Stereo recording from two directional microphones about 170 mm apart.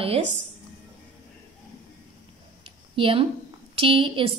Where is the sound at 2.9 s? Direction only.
30° right (ahead or behind).